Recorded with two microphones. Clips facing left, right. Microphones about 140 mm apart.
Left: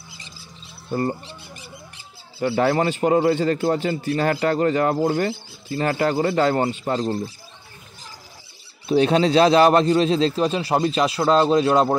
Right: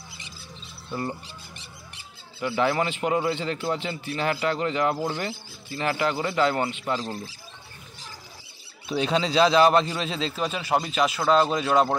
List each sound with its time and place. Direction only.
2.6 s a man's voice: 40° left (ahead or behind)
8.8 s a man's voice: 50° left (ahead or behind); by 12.0 s 30° left (ahead or behind)